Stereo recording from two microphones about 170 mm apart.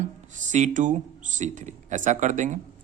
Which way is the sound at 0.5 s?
45° right (ahead or behind).